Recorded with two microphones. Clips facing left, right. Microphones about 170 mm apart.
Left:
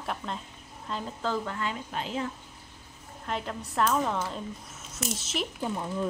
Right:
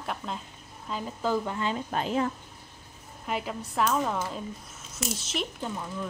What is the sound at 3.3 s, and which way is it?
Speech, 5° right (ahead or behind).